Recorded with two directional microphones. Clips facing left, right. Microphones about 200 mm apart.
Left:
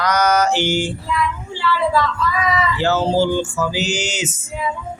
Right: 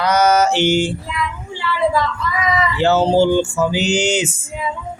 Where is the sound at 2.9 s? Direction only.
15° right (ahead or behind).